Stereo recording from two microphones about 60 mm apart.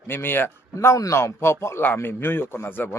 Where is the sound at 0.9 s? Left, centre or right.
Left.